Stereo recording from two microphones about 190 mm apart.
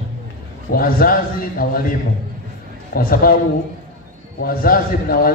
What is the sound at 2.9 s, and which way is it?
Speech, 50° left (ahead or behind).